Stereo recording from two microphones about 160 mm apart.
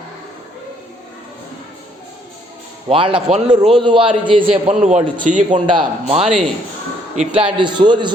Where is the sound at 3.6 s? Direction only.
35° right (ahead or behind).